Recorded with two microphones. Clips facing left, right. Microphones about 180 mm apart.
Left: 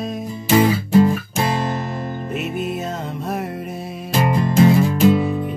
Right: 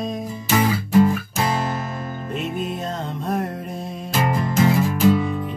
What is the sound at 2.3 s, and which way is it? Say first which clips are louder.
Music: left 1 dB; 5° left (ahead or behind).